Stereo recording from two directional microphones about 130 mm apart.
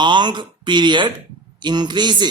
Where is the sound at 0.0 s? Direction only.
35° right (ahead or behind).